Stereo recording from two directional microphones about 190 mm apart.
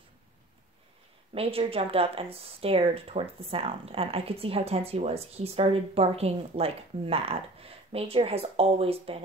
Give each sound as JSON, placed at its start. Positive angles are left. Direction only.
{"t": 1.3, "sound": "speech", "side_deg": -30}